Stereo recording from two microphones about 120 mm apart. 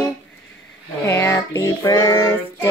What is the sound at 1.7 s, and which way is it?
Female singing, 30° left (ahead or behind).